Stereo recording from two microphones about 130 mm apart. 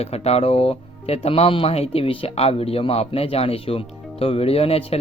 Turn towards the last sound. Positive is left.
turn(degrees=50)  # may be behind; listen again after turning